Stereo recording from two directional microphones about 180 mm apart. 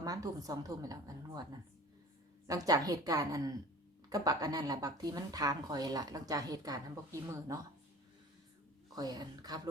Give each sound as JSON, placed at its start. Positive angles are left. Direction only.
{"t": 0.0, "sound": "a woman's voice", "side_deg": -20}
{"t": 2.5, "sound": "a woman's voice", "side_deg": -20}
{"t": 9.0, "sound": "a woman's voice", "side_deg": -20}